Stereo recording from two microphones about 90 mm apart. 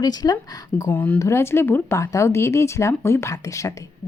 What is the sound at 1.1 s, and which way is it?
Speech, 30° left (ahead or behind).